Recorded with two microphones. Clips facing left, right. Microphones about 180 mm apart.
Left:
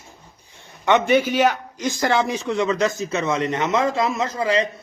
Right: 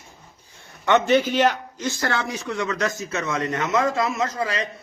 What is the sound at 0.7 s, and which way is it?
A man's voice, 15° left (ahead or behind).